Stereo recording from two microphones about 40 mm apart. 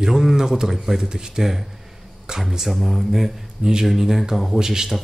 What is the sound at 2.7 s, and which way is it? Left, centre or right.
Speech, centre.